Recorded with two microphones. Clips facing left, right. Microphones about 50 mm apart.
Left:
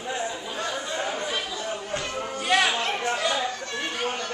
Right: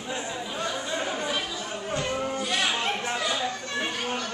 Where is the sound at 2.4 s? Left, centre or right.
Left.